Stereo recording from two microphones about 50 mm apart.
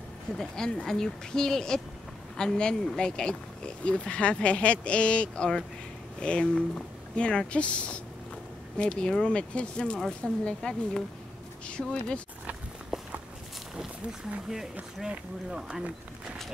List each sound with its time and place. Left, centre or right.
0.4 s speech: centre
12.9 s walk: centre
15.0 s speech: centre